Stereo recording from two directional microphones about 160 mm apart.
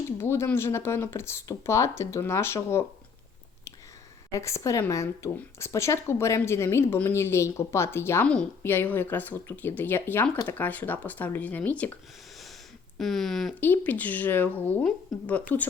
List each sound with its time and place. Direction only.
0.2 s speech: 15° left (ahead or behind)
4.3 s speech: 20° left (ahead or behind)
13.0 s speech: centre (ahead or behind)